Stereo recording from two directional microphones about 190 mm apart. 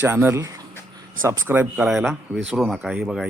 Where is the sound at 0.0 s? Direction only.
10° right (ahead or behind).